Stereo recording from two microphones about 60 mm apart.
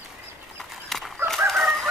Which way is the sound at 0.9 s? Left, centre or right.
Centre.